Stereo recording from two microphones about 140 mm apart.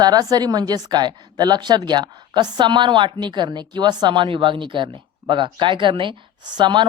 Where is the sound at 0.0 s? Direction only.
30° right (ahead or behind).